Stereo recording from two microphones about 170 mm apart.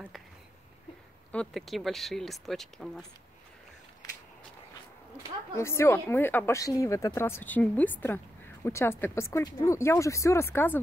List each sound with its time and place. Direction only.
1.3 s speech: 5° left (ahead or behind)
5.6 s speech: 15° left (ahead or behind)